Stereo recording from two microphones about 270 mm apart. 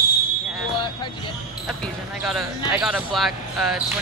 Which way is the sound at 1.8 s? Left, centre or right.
Centre.